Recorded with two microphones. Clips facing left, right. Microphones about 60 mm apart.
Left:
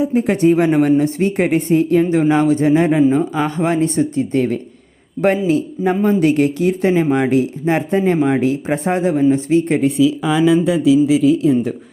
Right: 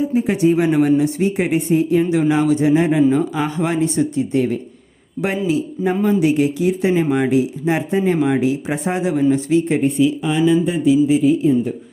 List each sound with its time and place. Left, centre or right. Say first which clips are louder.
0.0 s a woman's voice: left 2 dB; left
2.0 s speech: left 2 dB; left
3.1 s speech: left 1 dB; left
3.4 s a woman's voice: left 2 dB; left
6.1 s a woman's voice: left 2 dB; left
10.6 s speech: left 2 dB; left